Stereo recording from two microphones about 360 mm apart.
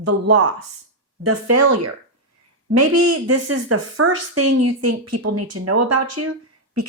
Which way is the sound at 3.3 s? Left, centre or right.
Right.